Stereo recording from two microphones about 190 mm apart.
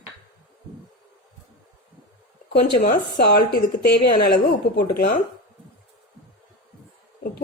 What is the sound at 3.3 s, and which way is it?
A woman's voice, 50° left (ahead or behind).